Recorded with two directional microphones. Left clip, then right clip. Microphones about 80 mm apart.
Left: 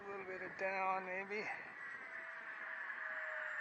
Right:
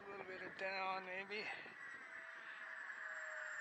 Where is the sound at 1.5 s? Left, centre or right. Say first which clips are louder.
Left 4 dB; right.